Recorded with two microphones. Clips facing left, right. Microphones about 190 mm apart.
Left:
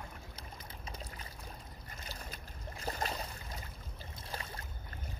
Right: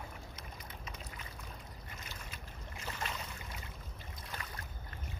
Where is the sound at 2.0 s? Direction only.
35° left (ahead or behind).